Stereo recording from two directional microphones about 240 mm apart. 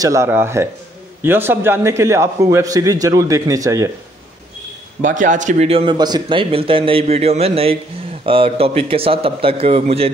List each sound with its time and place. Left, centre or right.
0.0 s a man's voice: centre
5.0 s a man's voice: right